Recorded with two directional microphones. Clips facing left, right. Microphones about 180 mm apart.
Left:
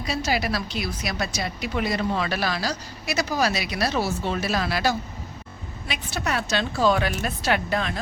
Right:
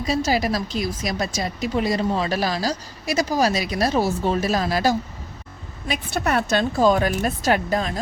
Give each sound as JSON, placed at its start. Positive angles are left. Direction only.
{"t": 0.1, "sound": "speech", "side_deg": -40}
{"t": 5.9, "sound": "a woman's voice", "side_deg": -50}